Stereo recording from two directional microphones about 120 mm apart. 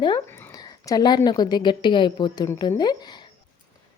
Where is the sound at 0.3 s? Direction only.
20° left (ahead or behind).